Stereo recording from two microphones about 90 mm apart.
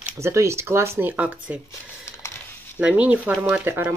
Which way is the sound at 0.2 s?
30° right (ahead or behind).